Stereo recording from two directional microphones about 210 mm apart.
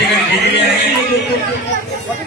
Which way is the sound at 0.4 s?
55° left (ahead or behind).